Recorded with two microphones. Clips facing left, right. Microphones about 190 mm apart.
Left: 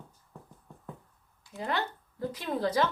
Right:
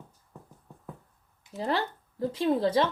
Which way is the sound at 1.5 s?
30° right (ahead or behind).